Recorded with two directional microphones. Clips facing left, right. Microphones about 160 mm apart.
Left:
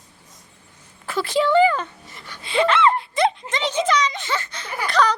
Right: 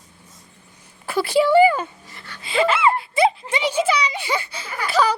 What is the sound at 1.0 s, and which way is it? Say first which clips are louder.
A child's voice: right 3 dB; 10° right (ahead or behind).